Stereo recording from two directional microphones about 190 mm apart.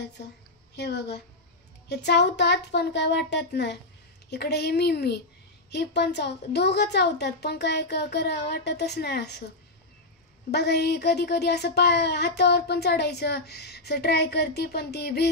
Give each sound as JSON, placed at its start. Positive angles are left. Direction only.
{"t": 0.7, "sound": "speech", "side_deg": 60}
{"t": 10.5, "sound": "speech", "side_deg": 60}